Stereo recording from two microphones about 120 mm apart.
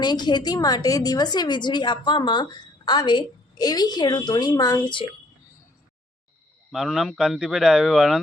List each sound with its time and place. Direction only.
0.0 s a woman's voice: 35° left (ahead or behind)
6.7 s a man's voice: 5° right (ahead or behind)